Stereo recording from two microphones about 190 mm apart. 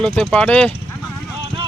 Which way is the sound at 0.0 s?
Centre (ahead or behind).